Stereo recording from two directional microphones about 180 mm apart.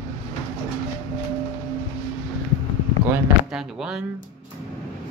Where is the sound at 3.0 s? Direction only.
10° right (ahead or behind).